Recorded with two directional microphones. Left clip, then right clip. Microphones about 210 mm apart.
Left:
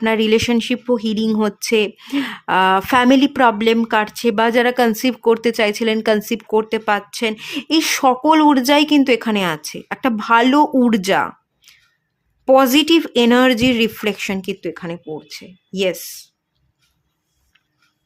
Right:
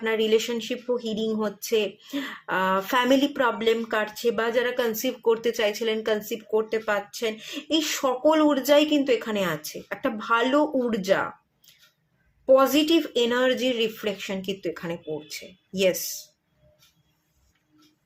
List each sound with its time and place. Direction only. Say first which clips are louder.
0.0 s speech: left 7 dB; 45° left (ahead or behind)